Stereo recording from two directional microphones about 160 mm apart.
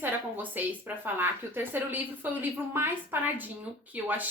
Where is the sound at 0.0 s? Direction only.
10° right (ahead or behind).